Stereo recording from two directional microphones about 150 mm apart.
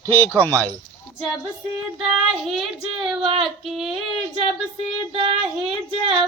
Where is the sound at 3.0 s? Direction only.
Centre (ahead or behind).